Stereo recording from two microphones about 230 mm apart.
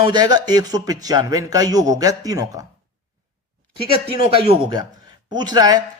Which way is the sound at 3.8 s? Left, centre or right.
Right.